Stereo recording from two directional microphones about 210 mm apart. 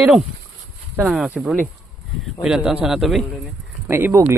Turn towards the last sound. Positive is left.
turn(degrees=-10)  # may be behind; listen again after turning